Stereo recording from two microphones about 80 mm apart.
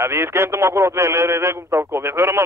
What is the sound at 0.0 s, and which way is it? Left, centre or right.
A man's voice, right.